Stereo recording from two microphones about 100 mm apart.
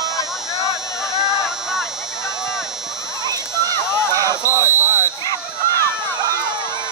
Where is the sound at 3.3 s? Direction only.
35° right (ahead or behind).